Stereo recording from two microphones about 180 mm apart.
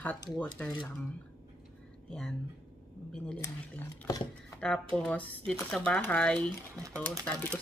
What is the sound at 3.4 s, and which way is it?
Speech, 15° left (ahead or behind).